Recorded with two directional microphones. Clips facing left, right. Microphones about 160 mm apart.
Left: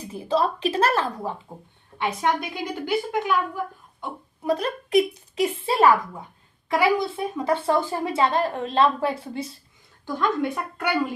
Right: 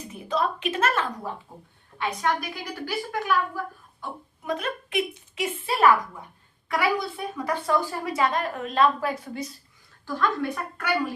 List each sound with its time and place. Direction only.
0.1 s a woman's voice: 30° left (ahead or behind)
4.4 s a woman's voice: 35° left (ahead or behind); by 10.9 s 20° left (ahead or behind)